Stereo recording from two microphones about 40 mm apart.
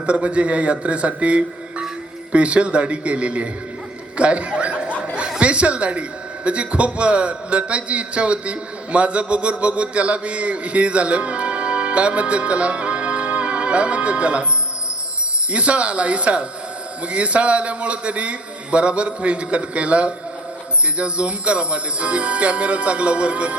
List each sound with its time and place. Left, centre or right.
0.0 s music: right
4.2 s a sound: right
5.4 s a man's voice: right
15.5 s music: right
17.1 s a man's voice: right
21.0 s music: right